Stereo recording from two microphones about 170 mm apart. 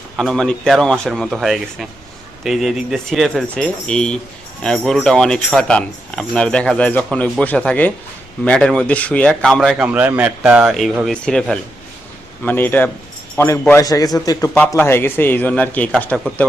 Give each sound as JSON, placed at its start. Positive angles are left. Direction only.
{"t": 0.2, "sound": "a man's voice", "side_deg": 5}
{"t": 14.5, "sound": "a man's voice", "side_deg": 10}